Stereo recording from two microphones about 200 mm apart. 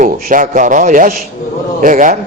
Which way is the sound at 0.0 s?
40° right (ahead or behind).